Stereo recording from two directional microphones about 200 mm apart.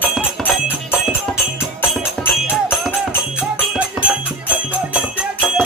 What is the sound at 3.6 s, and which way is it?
Music, 5° right (ahead or behind).